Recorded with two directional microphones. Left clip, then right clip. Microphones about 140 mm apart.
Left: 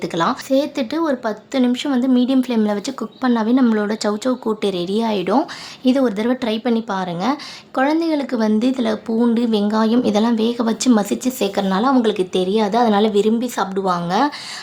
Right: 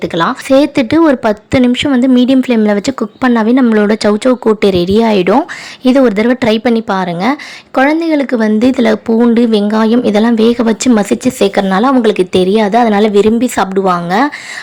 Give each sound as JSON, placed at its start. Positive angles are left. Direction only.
{"t": 0.0, "sound": "speech", "side_deg": -30}